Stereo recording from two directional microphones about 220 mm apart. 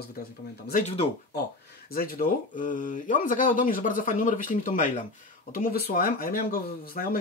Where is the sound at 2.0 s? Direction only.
35° left (ahead or behind).